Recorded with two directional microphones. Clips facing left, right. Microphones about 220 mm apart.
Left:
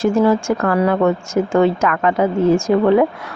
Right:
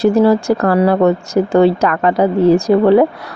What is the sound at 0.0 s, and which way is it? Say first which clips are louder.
Speech: right 4 dB; 35° right (ahead or behind).